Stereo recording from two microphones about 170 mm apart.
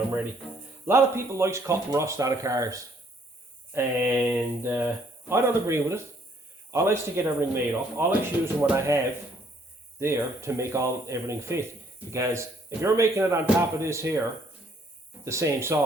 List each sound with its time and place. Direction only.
0.9 s speech: 15° right (ahead or behind)
10.0 s speech: 15° right (ahead or behind)
15.2 s speech: 15° right (ahead or behind)